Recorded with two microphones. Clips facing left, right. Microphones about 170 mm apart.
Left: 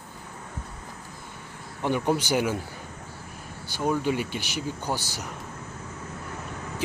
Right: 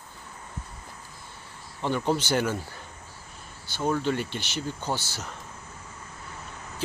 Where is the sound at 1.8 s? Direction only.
15° left (ahead or behind).